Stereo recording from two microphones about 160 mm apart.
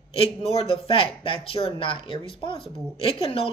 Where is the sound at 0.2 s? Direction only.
40° left (ahead or behind).